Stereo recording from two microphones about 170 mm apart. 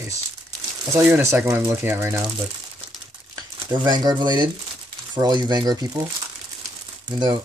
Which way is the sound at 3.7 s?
25° right (ahead or behind).